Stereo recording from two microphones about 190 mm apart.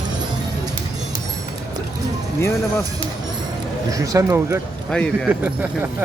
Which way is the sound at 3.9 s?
20° right (ahead or behind).